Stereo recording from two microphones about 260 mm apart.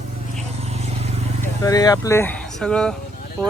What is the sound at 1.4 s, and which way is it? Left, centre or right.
Speech, centre.